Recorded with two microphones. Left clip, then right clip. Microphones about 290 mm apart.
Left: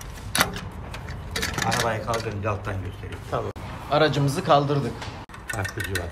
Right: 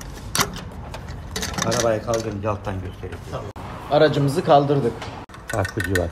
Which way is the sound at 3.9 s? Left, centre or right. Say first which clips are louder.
Right 4 dB; centre.